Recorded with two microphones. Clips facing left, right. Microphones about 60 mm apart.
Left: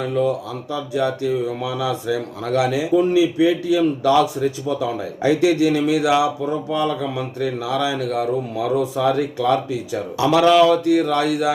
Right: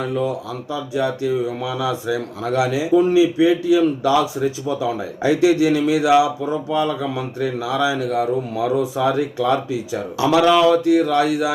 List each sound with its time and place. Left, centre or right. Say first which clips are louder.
0.1 s speech: left 2 dB; centre
6.4 s speech: right 1 dB; centre